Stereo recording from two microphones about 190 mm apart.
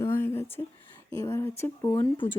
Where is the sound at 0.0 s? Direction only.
15° left (ahead or behind).